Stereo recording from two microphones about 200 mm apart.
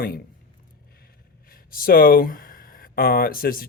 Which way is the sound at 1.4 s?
45° left (ahead or behind).